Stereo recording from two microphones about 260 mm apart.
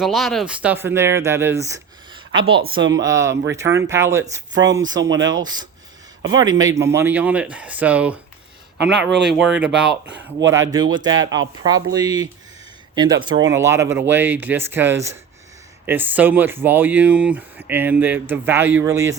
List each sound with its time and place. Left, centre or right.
0.0 s speech: centre
9.6 s speech: centre